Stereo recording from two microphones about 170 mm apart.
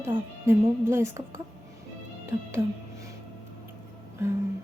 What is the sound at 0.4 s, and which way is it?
Speech, 15° right (ahead or behind).